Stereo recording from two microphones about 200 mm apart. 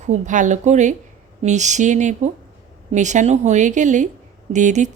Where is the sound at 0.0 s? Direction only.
35° right (ahead or behind).